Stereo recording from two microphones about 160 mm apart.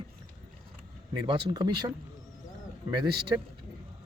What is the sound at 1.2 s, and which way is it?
Speech, 30° right (ahead or behind).